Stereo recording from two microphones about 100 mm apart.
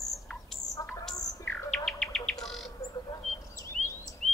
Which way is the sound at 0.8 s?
35° left (ahead or behind).